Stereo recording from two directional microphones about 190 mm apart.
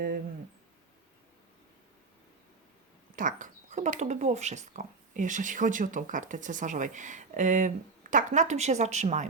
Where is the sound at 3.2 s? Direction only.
45° right (ahead or behind).